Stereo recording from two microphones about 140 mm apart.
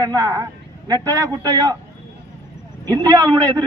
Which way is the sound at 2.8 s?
30° right (ahead or behind).